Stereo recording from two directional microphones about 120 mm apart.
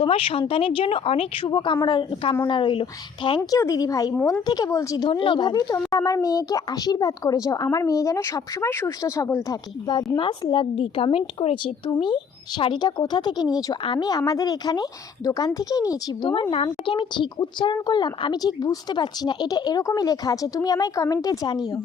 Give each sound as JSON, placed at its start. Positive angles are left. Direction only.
{"t": 0.0, "sound": "speech", "side_deg": 50}
{"t": 3.6, "sound": "a woman's voice", "side_deg": 25}
{"t": 5.0, "sound": "a woman's voice", "side_deg": 45}
{"t": 16.3, "sound": "speech", "side_deg": 45}